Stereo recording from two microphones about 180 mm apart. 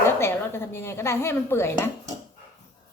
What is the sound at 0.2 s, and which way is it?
Speech, 15° left (ahead or behind).